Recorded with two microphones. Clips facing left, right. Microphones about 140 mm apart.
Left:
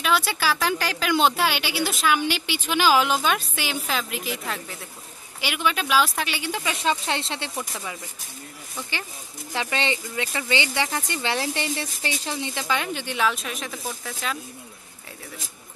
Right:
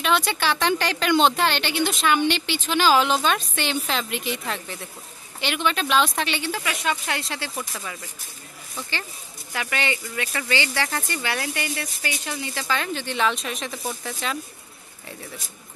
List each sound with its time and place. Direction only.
0.0 s a woman's voice: 5° left (ahead or behind)
6.5 s speech: 25° left (ahead or behind)
9.5 s a woman's voice: 25° left (ahead or behind); by 14.4 s centre (ahead or behind)